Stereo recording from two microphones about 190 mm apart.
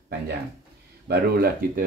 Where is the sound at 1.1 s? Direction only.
55° right (ahead or behind).